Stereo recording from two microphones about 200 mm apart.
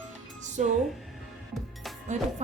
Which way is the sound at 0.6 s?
40° right (ahead or behind).